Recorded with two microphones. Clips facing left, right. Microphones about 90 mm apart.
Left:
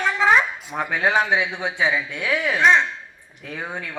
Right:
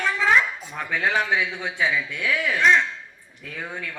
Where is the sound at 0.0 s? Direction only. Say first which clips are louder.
Left 2 dB; 20° left (ahead or behind).